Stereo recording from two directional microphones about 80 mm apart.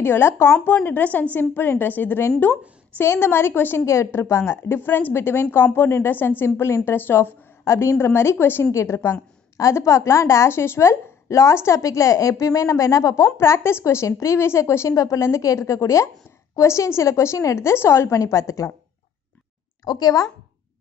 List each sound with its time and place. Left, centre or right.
0.0 s a woman's voice: left
0.8 s a woman's voice: left
19.8 s speech: left